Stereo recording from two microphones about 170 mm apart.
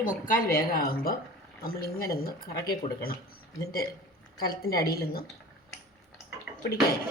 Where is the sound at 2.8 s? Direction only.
45° left (ahead or behind).